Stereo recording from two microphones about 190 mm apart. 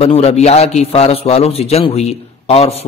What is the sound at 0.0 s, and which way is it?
A man's voice, 35° left (ahead or behind).